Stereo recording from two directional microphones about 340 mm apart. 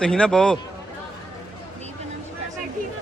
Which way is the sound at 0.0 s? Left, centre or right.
Centre.